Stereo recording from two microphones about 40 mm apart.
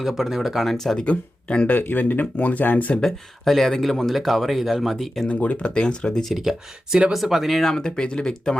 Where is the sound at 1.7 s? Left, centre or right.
Left.